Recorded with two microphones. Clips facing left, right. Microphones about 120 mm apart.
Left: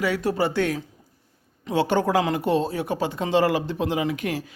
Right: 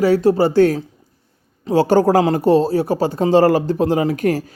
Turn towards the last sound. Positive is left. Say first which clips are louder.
# right 8 dB
turn(degrees=-40)  # may be behind; listen again after turning